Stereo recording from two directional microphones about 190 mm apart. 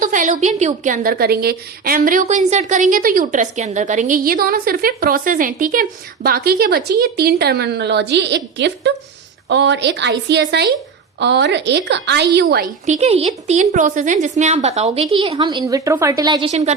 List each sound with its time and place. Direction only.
0.0 s a woman's voice: 45° right (ahead or behind); by 12.6 s 60° right (ahead or behind)
12.8 s a woman's voice: 35° right (ahead or behind)
16.5 s a woman's voice: 35° right (ahead or behind)